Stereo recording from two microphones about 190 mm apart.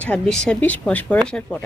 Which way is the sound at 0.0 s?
5° left (ahead or behind).